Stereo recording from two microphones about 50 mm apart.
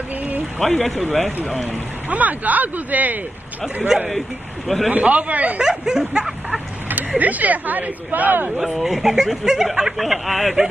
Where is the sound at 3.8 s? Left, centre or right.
Centre.